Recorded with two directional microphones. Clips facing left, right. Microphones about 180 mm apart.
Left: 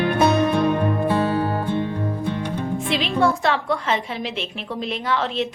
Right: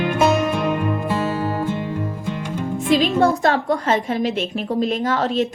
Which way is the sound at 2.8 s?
45° right (ahead or behind).